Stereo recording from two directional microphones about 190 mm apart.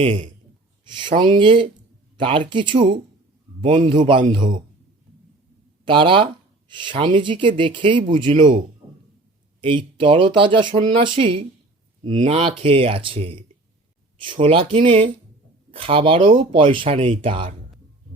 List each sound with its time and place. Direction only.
0.0 s speech: 40° right (ahead or behind)
0.9 s speech: 25° right (ahead or behind)
3.8 s speech: 40° right (ahead or behind)
4.0 s speech: 25° right (ahead or behind)
5.8 s speech: 25° right (ahead or behind)
8.1 s speech: 40° right (ahead or behind)
9.6 s speech: 25° right (ahead or behind)